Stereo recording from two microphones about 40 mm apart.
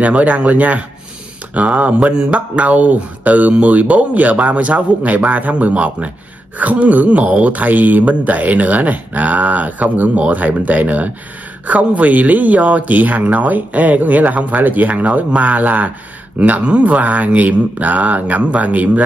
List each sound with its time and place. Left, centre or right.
0.0 s speech: right
2.0 s speech: right
16.6 s speech: right